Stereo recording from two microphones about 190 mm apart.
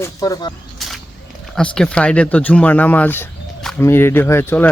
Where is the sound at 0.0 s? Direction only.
20° left (ahead or behind).